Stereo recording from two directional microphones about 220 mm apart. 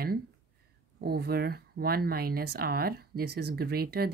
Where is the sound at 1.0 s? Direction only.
45° right (ahead or behind).